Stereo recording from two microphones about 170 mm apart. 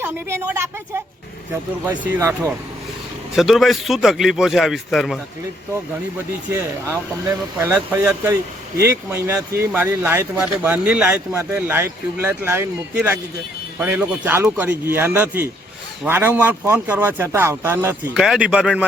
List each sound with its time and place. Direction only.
0.0 s speech: 15° right (ahead or behind)
3.3 s speech: centre (ahead or behind)
7.6 s speech: 10° right (ahead or behind)
18.1 s speech: 5° right (ahead or behind)